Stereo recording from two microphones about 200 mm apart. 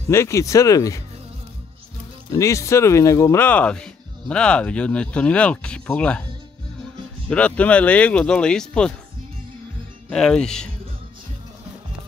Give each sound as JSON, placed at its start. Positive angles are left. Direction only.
{"t": 0.1, "sound": "speech", "side_deg": 15}
{"t": 2.3, "sound": "speech", "side_deg": 15}
{"t": 7.2, "sound": "speech", "side_deg": 5}
{"t": 10.0, "sound": "speech", "side_deg": 5}